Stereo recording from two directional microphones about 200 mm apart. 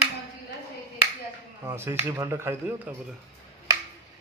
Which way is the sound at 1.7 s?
10° right (ahead or behind).